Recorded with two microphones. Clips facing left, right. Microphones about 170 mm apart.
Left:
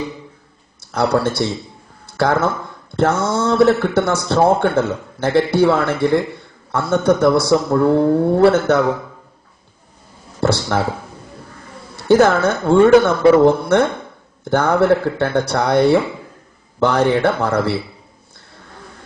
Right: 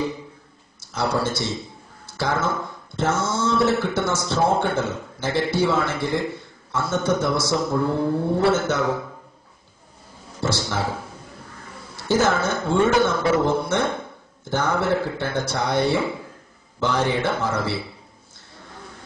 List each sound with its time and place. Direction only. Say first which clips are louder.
0.9 s a man's voice: left 7 dB; 60° left (ahead or behind)
10.4 s a man's voice: left 8 dB; 60° left (ahead or behind)
12.1 s a man's voice: left 8 dB; 60° left (ahead or behind)